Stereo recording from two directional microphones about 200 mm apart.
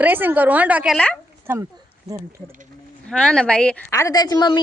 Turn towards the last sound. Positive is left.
turn(degrees=20)  # may be behind; listen again after turning